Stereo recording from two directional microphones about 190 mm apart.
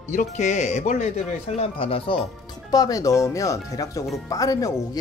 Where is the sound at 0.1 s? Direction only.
40° left (ahead or behind).